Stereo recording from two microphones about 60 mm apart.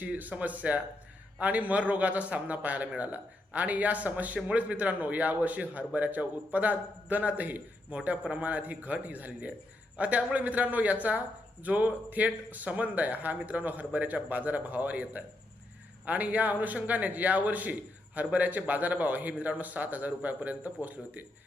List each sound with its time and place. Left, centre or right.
0.0 s speech: right